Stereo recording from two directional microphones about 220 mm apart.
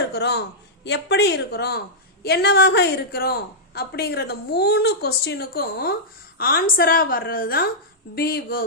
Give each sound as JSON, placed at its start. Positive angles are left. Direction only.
{"t": 0.1, "sound": "a man's voice", "side_deg": 50}